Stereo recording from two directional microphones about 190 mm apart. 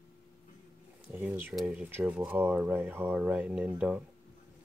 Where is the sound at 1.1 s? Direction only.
10° right (ahead or behind).